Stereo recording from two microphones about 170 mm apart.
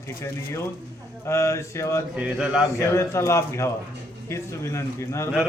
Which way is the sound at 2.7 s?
15° left (ahead or behind).